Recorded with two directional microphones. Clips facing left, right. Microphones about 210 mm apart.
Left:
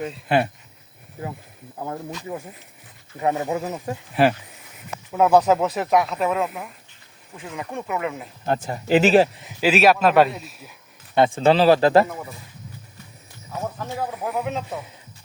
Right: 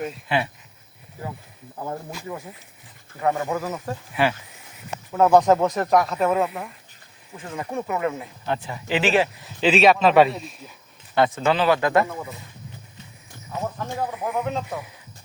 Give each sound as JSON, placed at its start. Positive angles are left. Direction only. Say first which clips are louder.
{"t": 0.3, "sound": "speech", "louder": "left 5 dB", "side_deg": 50}
{"t": 3.2, "sound": "speech", "louder": "left 1 dB", "side_deg": 20}
{"t": 4.1, "sound": "speech", "louder": "left 4 dB", "side_deg": 40}
{"t": 5.1, "sound": "speech", "louder": "even", "side_deg": 5}
{"t": 8.4, "sound": "speech", "louder": "left 5 dB", "side_deg": 45}
{"t": 9.3, "sound": "speech", "louder": "left 1 dB", "side_deg": 20}
{"t": 9.6, "sound": "speech", "louder": "even", "side_deg": 5}
{"t": 11.1, "sound": "speech", "louder": "left 3 dB", "side_deg": 25}
{"t": 13.7, "sound": "speech", "louder": "even", "side_deg": 5}